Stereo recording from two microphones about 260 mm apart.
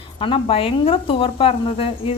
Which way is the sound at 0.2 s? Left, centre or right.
Left.